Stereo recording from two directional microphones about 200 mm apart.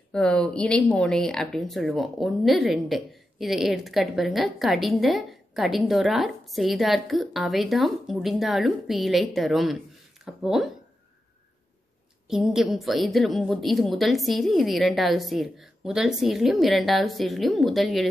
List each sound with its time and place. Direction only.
0.1 s speech: 5° left (ahead or behind)
12.3 s speech: 5° right (ahead or behind)